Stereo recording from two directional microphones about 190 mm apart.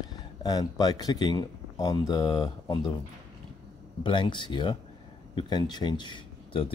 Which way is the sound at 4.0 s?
25° left (ahead or behind).